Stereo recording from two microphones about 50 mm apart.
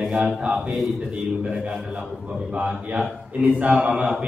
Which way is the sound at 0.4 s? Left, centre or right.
Centre.